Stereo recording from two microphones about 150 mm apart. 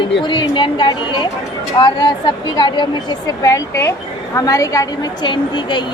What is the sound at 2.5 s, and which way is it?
A woman's voice, 30° left (ahead or behind).